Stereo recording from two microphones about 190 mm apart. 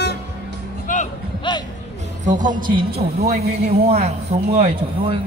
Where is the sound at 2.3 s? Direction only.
45° right (ahead or behind).